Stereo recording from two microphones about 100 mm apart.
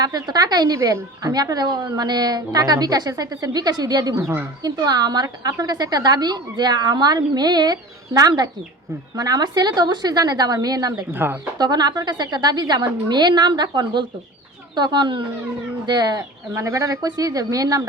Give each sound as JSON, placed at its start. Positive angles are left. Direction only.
{"t": 0.0, "sound": "a woman's voice", "side_deg": -40}
{"t": 0.8, "sound": "speech", "side_deg": -30}
{"t": 1.3, "sound": "a woman's voice", "side_deg": -40}
{"t": 11.1, "sound": "speech", "side_deg": -20}
{"t": 11.5, "sound": "a woman's voice", "side_deg": -45}